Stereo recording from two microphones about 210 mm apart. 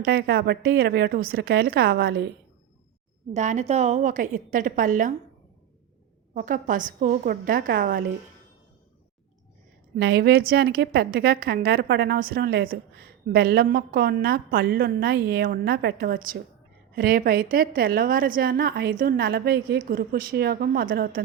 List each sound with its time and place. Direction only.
0.0 s a woman's voice: 45° right (ahead or behind)
3.3 s a woman's voice: 35° right (ahead or behind)
6.3 s a woman's voice: 40° right (ahead or behind)
9.9 s a woman's voice: 50° right (ahead or behind)